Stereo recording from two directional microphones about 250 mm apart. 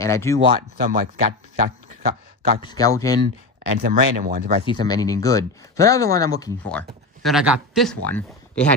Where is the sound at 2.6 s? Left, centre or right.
Centre.